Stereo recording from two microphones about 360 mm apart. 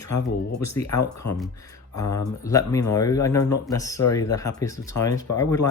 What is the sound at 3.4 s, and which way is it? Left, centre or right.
Speech, left.